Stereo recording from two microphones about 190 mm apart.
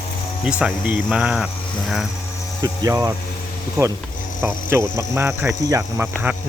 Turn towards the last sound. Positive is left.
turn(degrees=-15)  # may be behind; listen again after turning